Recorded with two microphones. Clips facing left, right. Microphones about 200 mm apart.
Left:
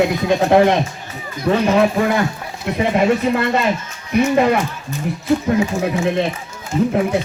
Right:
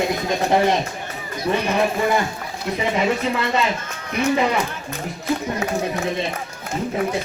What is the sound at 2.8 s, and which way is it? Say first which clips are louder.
Speech: left 6 dB; 55° left (ahead or behind).